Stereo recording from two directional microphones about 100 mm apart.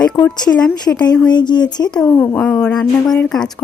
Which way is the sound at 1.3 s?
45° left (ahead or behind).